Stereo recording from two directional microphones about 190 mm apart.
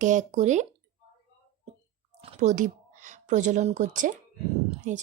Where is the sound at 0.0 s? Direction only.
40° right (ahead or behind).